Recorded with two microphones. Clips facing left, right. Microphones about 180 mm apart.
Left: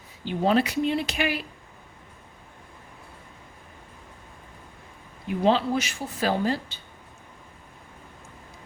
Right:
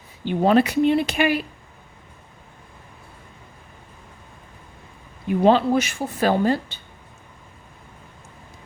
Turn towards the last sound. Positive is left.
turn(degrees=-55)  # may be behind; listen again after turning